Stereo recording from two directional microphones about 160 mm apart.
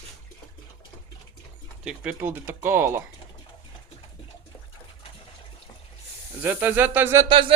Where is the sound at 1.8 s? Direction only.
5° right (ahead or behind).